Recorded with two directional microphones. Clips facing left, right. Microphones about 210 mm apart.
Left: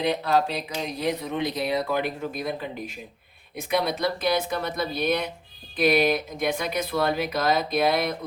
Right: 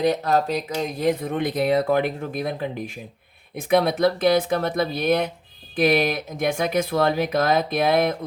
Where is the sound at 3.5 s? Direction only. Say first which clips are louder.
Right 6 dB; 50° right (ahead or behind).